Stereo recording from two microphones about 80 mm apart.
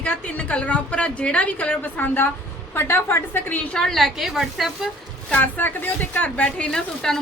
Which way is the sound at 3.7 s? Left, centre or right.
Centre.